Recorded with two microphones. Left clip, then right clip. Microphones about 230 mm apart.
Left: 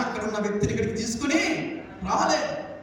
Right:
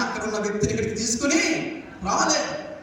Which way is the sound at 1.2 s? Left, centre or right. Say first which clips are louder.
Right 2 dB; right.